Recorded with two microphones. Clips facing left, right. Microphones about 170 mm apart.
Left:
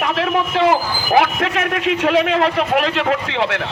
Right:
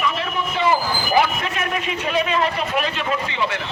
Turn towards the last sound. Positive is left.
turn(degrees=90)